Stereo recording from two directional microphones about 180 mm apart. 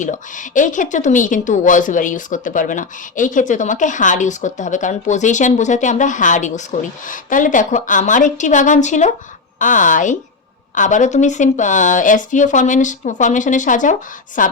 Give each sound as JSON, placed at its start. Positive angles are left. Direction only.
{"t": 0.0, "sound": "a woman's voice", "side_deg": 45}